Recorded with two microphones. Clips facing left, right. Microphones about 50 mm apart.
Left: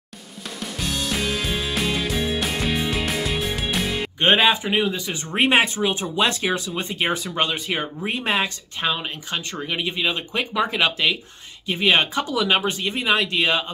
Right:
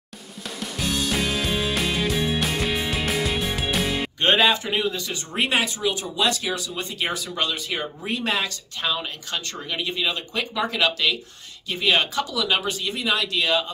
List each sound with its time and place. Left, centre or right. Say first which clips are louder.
0.6 s music: right 1 dB; centre
4.2 s speech: left 2 dB; left